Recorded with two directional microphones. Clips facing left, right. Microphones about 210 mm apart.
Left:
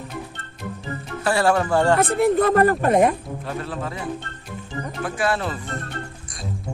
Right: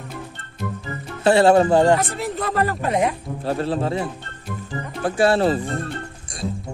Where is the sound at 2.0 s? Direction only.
55° left (ahead or behind).